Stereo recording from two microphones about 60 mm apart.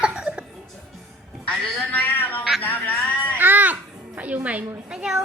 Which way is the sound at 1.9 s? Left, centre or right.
Left.